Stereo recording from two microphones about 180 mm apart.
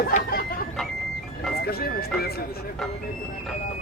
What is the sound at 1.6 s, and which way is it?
Speech, 60° left (ahead or behind).